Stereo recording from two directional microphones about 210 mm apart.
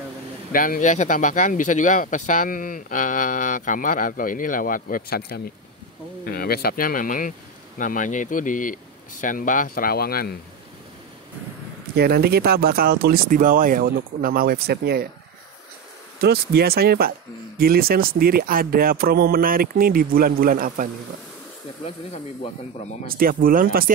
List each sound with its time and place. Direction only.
0.5 s speech: 40° left (ahead or behind)
11.9 s speech: 50° right (ahead or behind)
16.2 s speech: 50° right (ahead or behind)
21.8 s speech: 30° left (ahead or behind)
23.0 s speech: 45° right (ahead or behind)